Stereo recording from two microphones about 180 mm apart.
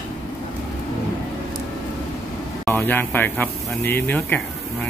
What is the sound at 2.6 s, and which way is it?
Speech, 10° left (ahead or behind).